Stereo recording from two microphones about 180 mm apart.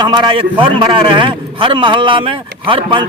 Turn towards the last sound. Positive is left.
turn(degrees=-30)  # may be behind; listen again after turning